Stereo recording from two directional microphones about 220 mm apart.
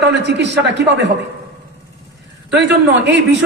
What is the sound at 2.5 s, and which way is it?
Speech, 50° right (ahead or behind).